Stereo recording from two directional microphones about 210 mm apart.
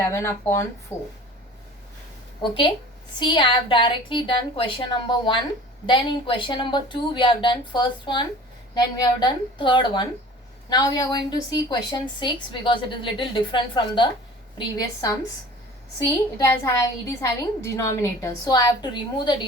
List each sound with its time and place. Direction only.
0.0 s a woman's voice: 15° left (ahead or behind)
2.4 s a woman's voice: 25° left (ahead or behind)
16.4 s a woman's voice: 15° left (ahead or behind)